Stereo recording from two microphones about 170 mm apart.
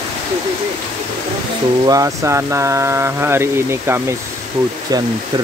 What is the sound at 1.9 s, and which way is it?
Speech, 20° right (ahead or behind).